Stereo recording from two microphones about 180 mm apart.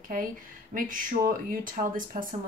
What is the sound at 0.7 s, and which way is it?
Speech, 50° right (ahead or behind).